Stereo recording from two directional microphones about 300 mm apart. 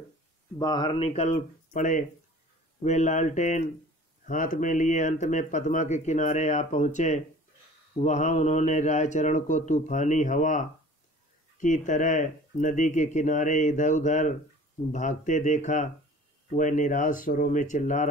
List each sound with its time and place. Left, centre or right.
0.6 s speech: centre
11.6 s speech: left